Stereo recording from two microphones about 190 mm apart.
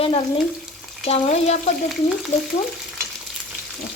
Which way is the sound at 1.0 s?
35° left (ahead or behind).